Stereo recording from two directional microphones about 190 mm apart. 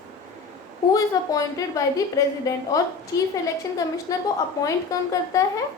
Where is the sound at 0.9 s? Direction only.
20° left (ahead or behind).